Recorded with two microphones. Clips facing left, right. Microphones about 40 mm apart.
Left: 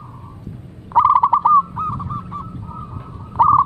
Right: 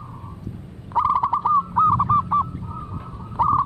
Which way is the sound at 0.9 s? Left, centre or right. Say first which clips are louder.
Left 7 dB; left.